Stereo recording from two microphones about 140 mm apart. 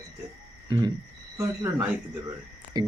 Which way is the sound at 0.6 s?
30° right (ahead or behind).